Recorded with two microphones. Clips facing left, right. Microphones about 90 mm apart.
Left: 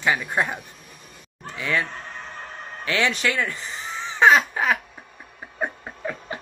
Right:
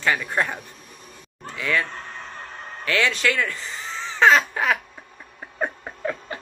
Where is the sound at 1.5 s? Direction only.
25° left (ahead or behind).